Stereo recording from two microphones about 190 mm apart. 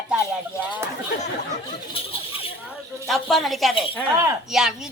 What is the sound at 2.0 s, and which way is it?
Speech, 30° left (ahead or behind).